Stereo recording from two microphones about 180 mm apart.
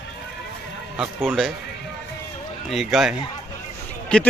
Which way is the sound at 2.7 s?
Centre (ahead or behind).